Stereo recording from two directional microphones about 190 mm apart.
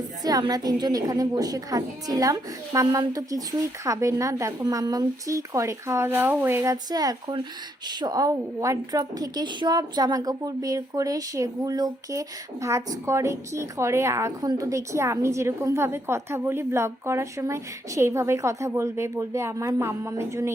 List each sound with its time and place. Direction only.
0.2 s a woman's voice: 20° right (ahead or behind)